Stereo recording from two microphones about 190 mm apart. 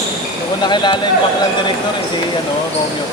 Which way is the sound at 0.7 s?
25° left (ahead or behind).